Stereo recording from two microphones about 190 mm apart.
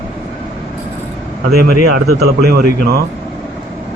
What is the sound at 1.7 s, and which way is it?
Speech, 55° right (ahead or behind).